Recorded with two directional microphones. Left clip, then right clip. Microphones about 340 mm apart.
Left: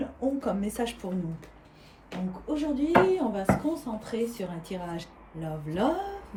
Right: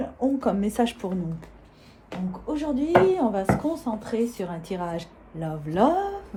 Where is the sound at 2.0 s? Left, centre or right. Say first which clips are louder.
Right 2 dB; centre.